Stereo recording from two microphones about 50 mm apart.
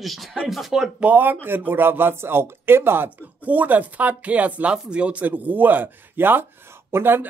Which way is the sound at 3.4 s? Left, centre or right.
Right.